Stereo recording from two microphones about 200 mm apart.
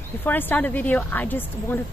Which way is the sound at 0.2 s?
10° left (ahead or behind).